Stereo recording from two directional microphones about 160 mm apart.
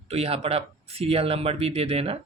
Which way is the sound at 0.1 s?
40° right (ahead or behind).